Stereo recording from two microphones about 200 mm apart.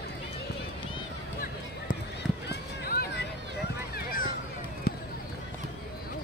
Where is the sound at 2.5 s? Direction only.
50° left (ahead or behind).